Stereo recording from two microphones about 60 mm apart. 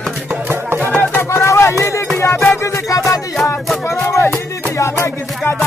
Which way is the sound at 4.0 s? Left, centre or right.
Left.